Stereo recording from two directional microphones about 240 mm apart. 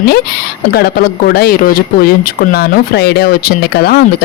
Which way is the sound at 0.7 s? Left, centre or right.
Left.